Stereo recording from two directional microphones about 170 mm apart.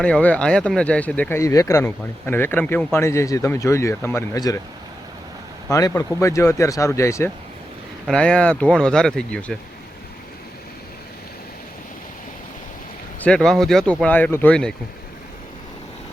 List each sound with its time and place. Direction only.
0.0 s speech: 5° left (ahead or behind)
5.7 s speech: 20° left (ahead or behind)
8.0 s speech: 5° left (ahead or behind)
13.2 s speech: 5° left (ahead or behind)